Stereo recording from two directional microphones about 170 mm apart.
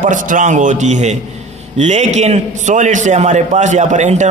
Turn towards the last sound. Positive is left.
turn(degrees=-45)  # may be behind; listen again after turning